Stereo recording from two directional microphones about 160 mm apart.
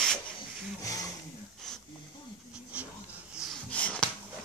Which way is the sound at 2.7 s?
10° right (ahead or behind).